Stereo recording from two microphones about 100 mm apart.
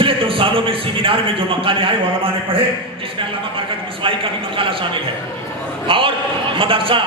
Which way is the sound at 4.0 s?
60° right (ahead or behind).